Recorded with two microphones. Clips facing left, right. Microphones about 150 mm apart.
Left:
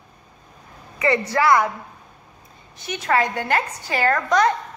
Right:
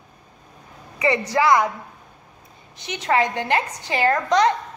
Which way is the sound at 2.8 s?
20° right (ahead or behind).